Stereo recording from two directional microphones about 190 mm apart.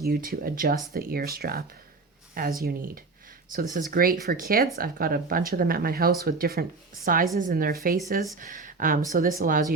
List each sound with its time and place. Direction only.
0.0 s speech: 50° right (ahead or behind)